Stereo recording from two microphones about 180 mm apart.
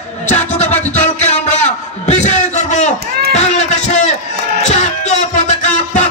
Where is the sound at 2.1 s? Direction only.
40° left (ahead or behind).